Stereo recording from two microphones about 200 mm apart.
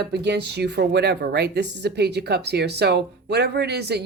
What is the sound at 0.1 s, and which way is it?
Speech, 55° right (ahead or behind).